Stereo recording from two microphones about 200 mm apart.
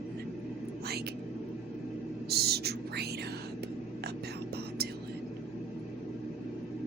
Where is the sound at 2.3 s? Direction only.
50° right (ahead or behind).